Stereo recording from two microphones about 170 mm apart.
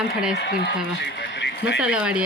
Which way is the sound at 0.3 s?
85° left.